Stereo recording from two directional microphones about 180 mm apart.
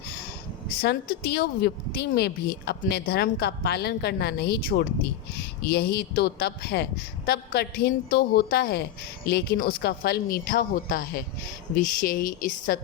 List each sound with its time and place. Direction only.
0.8 s a woman's voice: 60° left (ahead or behind)